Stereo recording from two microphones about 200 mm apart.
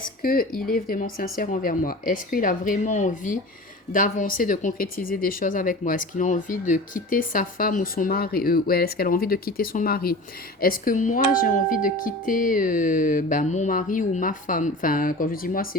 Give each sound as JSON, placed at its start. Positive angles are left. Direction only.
{"t": 0.2, "sound": "speech", "side_deg": 45}